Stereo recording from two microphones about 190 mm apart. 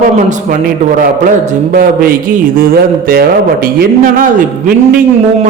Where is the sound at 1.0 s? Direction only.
45° right (ahead or behind).